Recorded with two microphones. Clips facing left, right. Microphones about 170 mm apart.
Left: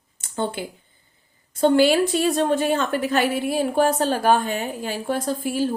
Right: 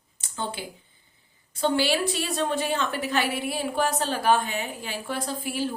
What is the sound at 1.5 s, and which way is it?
A woman's voice, 50° left (ahead or behind).